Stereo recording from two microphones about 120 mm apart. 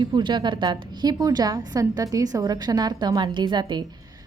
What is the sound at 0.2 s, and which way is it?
A woman's voice, 40° right (ahead or behind).